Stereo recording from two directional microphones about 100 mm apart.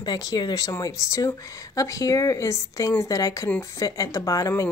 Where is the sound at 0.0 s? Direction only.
40° left (ahead or behind).